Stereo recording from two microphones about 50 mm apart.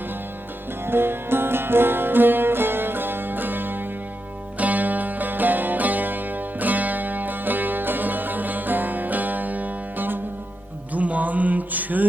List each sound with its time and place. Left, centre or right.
0.9 s music: right
10.9 s mantra: right